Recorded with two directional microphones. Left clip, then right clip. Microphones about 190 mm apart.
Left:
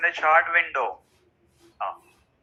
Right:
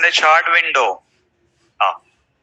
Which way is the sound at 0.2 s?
60° right (ahead or behind).